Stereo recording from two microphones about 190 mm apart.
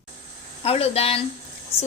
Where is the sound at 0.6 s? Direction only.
30° left (ahead or behind).